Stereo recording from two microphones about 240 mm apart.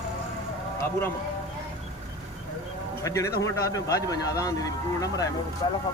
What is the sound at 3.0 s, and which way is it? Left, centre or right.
A man's voice, centre.